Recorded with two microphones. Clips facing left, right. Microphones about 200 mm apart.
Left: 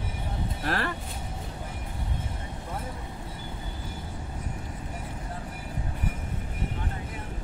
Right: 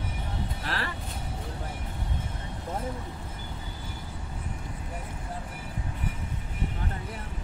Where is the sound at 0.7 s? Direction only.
50° left (ahead or behind).